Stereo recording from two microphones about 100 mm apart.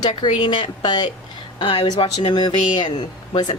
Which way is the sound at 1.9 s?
70° left (ahead or behind).